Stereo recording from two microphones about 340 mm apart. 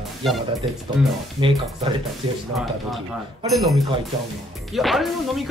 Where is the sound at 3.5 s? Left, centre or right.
Centre.